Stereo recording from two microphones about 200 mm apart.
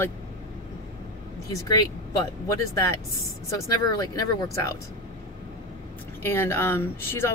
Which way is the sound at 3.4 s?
15° left (ahead or behind).